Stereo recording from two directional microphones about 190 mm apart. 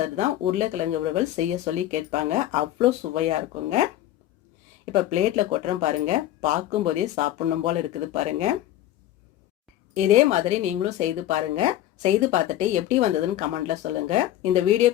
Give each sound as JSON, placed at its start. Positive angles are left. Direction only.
{"t": 0.2, "sound": "speech", "side_deg": -35}
{"t": 4.9, "sound": "speech", "side_deg": -35}
{"t": 9.9, "sound": "speech", "side_deg": -40}